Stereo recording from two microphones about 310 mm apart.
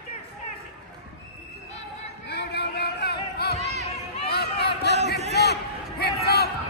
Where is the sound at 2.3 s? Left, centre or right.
Left.